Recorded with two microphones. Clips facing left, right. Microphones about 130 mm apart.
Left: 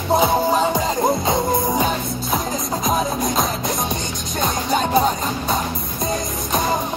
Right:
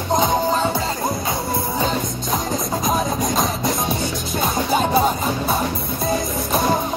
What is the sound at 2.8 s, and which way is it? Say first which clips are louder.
Music: left 1 dB; centre (ahead or behind).